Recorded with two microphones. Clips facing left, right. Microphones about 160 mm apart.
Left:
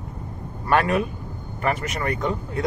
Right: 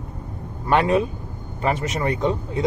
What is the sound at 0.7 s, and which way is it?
Speech, 25° right (ahead or behind).